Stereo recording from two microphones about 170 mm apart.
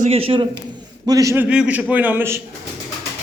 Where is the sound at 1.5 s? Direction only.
5° right (ahead or behind).